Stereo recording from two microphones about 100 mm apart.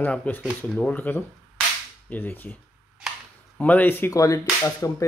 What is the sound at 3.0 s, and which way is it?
Camera, 5° right (ahead or behind).